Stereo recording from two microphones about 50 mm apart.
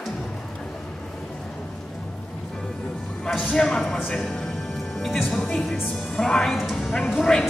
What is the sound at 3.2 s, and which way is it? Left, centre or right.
Music, centre.